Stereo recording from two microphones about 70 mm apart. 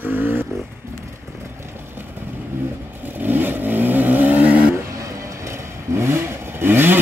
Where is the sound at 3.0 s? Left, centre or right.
Right.